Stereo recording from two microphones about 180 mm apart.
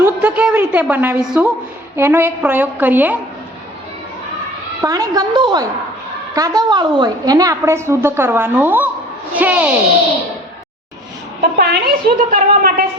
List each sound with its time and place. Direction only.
0.0 s a sound: 10° right (ahead or behind)
2.0 s a woman's voice: 10° right (ahead or behind)
4.8 s a woman's voice: 20° right (ahead or behind)
11.5 s a woman's voice: 60° right (ahead or behind)